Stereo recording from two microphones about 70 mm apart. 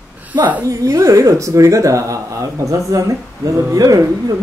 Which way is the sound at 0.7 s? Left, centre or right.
Right.